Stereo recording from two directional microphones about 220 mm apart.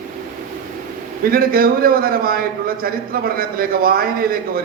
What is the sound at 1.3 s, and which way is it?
A man's voice, 40° right (ahead or behind).